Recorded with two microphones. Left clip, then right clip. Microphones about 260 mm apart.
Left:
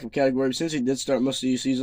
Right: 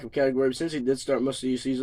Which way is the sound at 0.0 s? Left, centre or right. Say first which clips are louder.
Left 1 dB; left.